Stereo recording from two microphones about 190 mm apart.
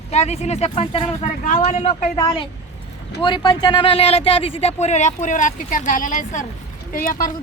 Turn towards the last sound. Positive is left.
turn(degrees=45)  # may be behind; listen again after turning